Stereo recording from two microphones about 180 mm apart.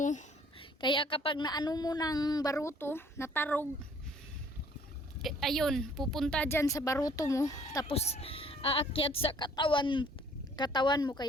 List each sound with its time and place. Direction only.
0.0 s a sound: 45° left (ahead or behind)
0.6 s a woman's voice: 30° left (ahead or behind); by 3.7 s 10° left (ahead or behind)
5.2 s a woman's voice: centre (ahead or behind); by 7.9 s 20° left (ahead or behind)
7.9 s a woman's voice: 35° left (ahead or behind)